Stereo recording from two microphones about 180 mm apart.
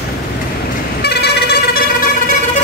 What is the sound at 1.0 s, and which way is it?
Vehicle, 65° left (ahead or behind).